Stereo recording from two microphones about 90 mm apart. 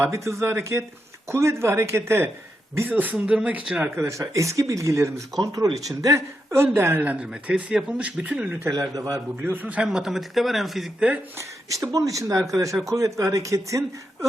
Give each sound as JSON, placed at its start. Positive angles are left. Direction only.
{"t": 0.0, "sound": "speech", "side_deg": -30}
{"t": 3.8, "sound": "speech", "side_deg": -30}
{"t": 7.0, "sound": "speech", "side_deg": -15}
{"t": 8.7, "sound": "speech", "side_deg": -40}
{"t": 9.4, "sound": "speech", "side_deg": -20}
{"t": 11.3, "sound": "speech", "side_deg": -35}